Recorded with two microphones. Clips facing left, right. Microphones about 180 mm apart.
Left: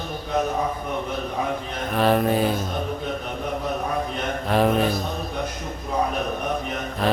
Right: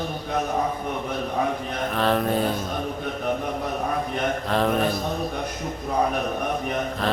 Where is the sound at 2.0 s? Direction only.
5° left (ahead or behind).